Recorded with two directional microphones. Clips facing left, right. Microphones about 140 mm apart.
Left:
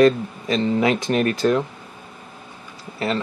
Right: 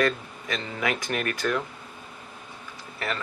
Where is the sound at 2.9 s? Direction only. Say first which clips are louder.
Left 8 dB; 25° left (ahead or behind).